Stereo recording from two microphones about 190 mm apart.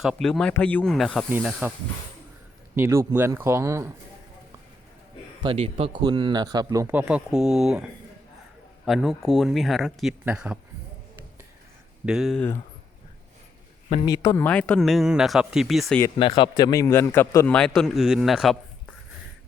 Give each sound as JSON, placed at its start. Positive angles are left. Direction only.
{"t": 0.0, "sound": "speech", "side_deg": 0}
{"t": 2.7, "sound": "speech", "side_deg": -15}
{"t": 5.4, "sound": "a man's voice", "side_deg": -30}
{"t": 12.0, "sound": "speech", "side_deg": 0}
{"t": 13.9, "sound": "speech", "side_deg": 20}
{"t": 14.4, "sound": "speech", "side_deg": 5}
{"t": 16.1, "sound": "a man's voice", "side_deg": 25}